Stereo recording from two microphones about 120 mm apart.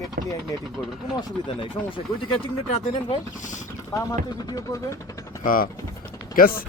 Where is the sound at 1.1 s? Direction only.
45° left (ahead or behind).